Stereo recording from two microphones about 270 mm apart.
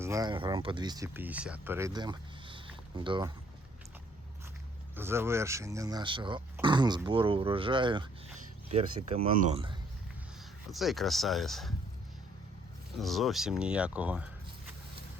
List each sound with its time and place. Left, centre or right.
0.0 s speech: centre
4.9 s speech: centre
10.7 s speech: centre
13.0 s speech: centre